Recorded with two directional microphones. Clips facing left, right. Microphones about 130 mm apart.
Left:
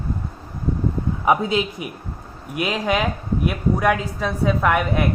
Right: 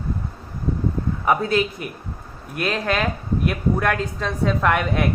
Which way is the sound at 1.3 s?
15° left (ahead or behind).